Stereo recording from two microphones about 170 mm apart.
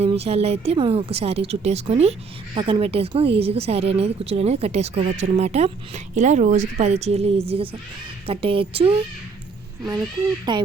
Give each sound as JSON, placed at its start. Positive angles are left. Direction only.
{"t": 0.0, "sound": "a woman's voice", "side_deg": -35}
{"t": 10.5, "sound": "speech", "side_deg": -25}